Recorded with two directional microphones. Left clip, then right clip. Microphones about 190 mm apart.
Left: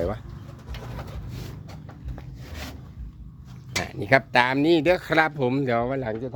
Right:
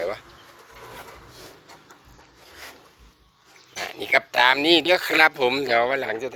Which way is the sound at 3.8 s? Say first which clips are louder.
Even; centre (ahead or behind).